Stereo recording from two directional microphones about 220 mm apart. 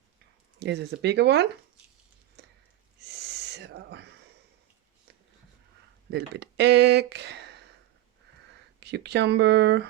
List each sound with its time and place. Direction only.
0.6 s speech: 50° right (ahead or behind)
2.4 s a sound: 50° right (ahead or behind)
3.0 s owl: 50° right (ahead or behind)
6.1 s speech: 50° right (ahead or behind)
8.8 s speech: 50° right (ahead or behind)